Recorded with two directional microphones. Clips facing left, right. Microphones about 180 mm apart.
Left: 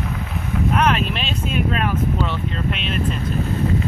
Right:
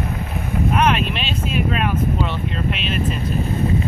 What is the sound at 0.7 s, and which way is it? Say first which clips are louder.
Vehicle: right 1 dB; 5° right (ahead or behind).